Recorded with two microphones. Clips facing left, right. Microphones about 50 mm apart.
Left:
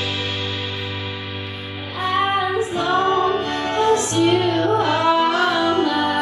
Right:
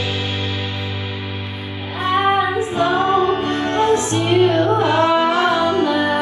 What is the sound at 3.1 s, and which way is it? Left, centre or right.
Music, right.